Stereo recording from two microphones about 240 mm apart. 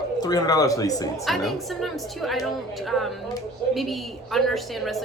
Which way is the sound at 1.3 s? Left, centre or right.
Centre.